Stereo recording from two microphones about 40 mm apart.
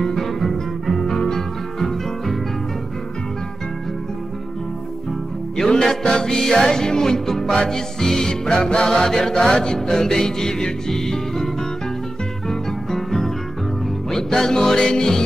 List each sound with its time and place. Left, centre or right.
0.0 s music: centre
5.6 s music: centre